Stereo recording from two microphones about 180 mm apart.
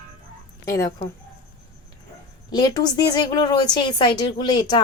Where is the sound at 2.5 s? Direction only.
20° left (ahead or behind).